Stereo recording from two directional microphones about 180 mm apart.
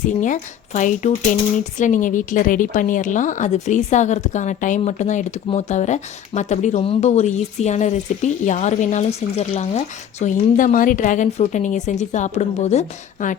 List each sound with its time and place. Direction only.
0.1 s a woman's voice: 45° left (ahead or behind)